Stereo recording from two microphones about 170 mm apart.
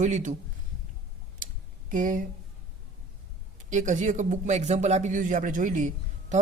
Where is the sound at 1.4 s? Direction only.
50° right (ahead or behind).